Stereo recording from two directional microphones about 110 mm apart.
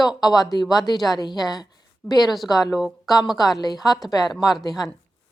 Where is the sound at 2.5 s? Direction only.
35° left (ahead or behind).